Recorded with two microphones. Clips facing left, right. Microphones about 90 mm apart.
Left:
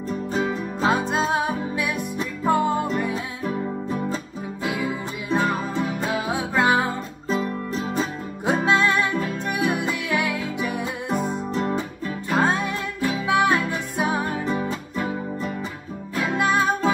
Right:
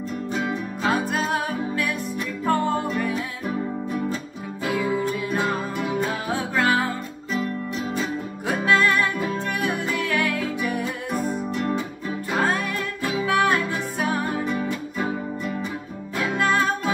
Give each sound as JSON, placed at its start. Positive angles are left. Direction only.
{"t": 0.5, "sound": "music", "side_deg": 20}
{"t": 5.3, "sound": "music", "side_deg": 20}
{"t": 7.2, "sound": "music", "side_deg": 35}
{"t": 16.3, "sound": "music", "side_deg": 15}